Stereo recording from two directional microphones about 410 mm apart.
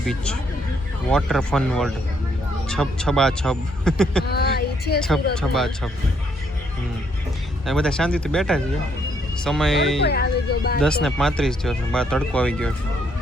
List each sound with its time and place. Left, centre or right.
0.0 s speech: centre
4.3 s a sound: left
4.9 s speech: centre
7.7 s speech: centre
10.0 s speech: left
10.8 s speech: centre